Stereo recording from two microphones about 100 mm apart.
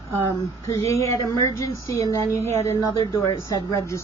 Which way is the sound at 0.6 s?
30° left (ahead or behind).